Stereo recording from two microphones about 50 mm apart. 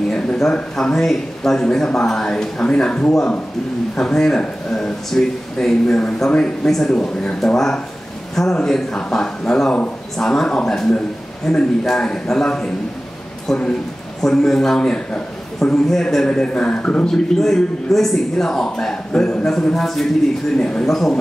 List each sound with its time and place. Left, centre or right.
0.1 s speech: centre
17.1 s speech: centre
20.5 s speech: centre
20.8 s speech: centre